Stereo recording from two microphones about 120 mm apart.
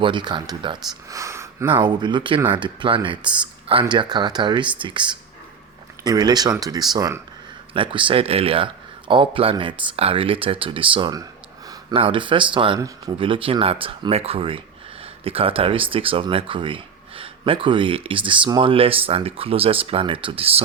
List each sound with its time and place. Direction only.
0.0 s speech: 40° right (ahead or behind)
1.1 s a sound: 25° right (ahead or behind)
1.6 s speech: 40° right (ahead or behind)
7.7 s speech: 45° right (ahead or behind)